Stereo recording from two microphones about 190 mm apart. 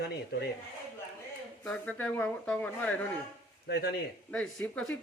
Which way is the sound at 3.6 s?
60° left (ahead or behind).